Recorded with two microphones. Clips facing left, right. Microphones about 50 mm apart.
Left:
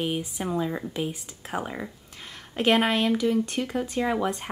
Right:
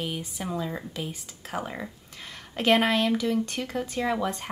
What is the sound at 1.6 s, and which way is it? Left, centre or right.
Speech, centre.